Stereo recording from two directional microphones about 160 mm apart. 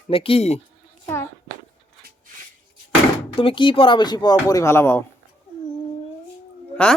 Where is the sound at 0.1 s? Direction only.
35° left (ahead or behind).